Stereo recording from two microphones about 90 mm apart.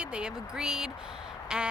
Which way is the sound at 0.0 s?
10° right (ahead or behind).